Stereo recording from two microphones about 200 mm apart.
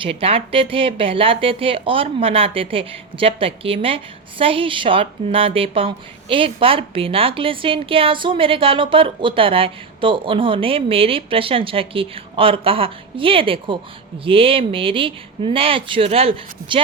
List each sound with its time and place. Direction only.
0.0 s a woman's voice: 30° right (ahead or behind)